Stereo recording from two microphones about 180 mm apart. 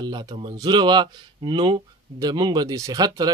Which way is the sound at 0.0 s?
25° right (ahead or behind).